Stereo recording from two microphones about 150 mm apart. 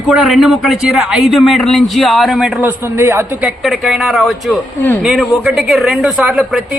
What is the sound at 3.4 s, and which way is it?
A woman's voice, centre (ahead or behind).